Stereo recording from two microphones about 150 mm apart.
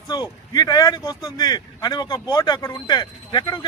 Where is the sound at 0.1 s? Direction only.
25° left (ahead or behind).